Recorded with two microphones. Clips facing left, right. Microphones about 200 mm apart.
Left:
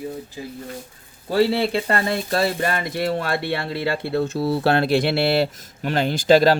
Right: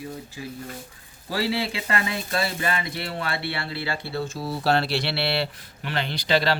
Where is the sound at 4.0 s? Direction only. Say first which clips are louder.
Left 8 dB; 60° left (ahead or behind).